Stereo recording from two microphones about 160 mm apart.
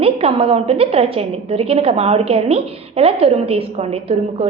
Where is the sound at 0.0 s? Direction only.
35° right (ahead or behind).